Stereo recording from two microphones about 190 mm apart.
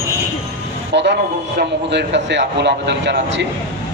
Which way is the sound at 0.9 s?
65° right (ahead or behind).